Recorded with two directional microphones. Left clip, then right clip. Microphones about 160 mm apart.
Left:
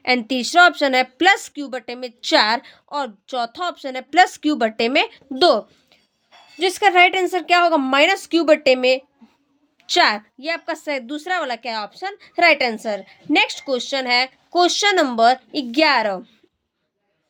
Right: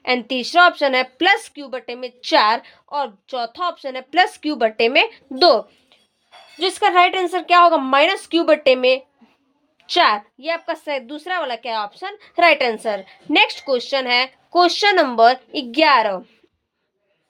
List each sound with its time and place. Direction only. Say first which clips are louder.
0.0 s a woman's voice: left 1 dB; 40° left (ahead or behind)